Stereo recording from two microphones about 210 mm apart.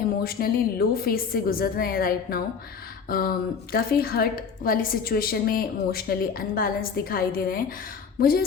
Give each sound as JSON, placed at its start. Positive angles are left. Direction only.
{"t": 0.2, "sound": "a woman's voice", "side_deg": 45}